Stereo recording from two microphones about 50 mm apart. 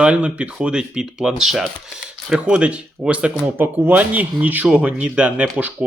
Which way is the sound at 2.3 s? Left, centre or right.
Centre.